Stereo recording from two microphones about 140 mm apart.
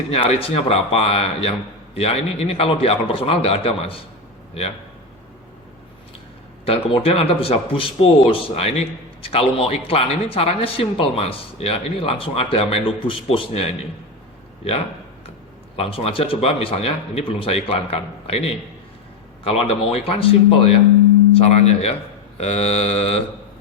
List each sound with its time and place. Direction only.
0.1 s speech: 45° left (ahead or behind)
6.7 s speech: 45° left (ahead or behind)
15.7 s speech: 45° left (ahead or behind)